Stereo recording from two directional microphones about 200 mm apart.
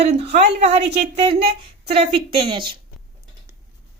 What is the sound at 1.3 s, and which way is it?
Speech, 50° right (ahead or behind).